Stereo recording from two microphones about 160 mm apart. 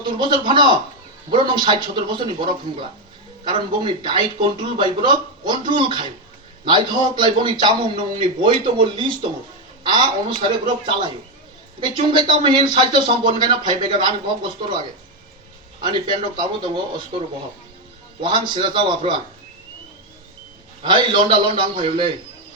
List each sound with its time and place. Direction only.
0.0 s a man's voice: 30° right (ahead or behind)
16.2 s a man's voice: 30° right (ahead or behind)
20.8 s a man's voice: 30° right (ahead or behind)